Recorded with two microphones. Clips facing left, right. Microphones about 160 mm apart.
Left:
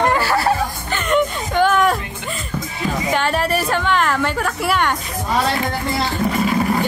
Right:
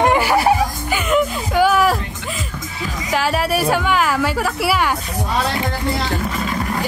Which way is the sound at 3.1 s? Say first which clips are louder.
Right 2 dB; 5° right (ahead or behind).